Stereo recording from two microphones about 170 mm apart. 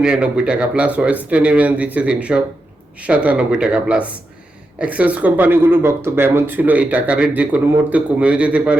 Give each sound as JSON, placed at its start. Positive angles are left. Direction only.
{"t": 0.0, "sound": "speech", "side_deg": -5}